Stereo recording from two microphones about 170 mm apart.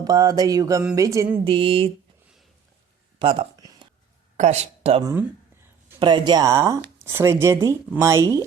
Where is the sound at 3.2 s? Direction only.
30° right (ahead or behind).